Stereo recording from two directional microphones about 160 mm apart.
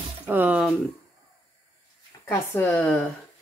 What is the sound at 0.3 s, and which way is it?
Speech, 10° right (ahead or behind).